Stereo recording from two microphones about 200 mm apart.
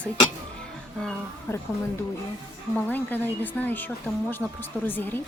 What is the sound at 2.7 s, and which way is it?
Speech, 10° left (ahead or behind).